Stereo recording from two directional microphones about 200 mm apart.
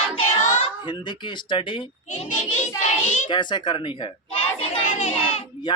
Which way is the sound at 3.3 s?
20° left (ahead or behind).